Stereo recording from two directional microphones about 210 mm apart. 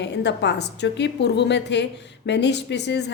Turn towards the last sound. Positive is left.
turn(degrees=55)  # may be behind; listen again after turning